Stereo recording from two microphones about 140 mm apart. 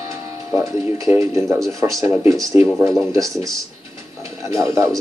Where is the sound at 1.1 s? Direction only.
20° right (ahead or behind).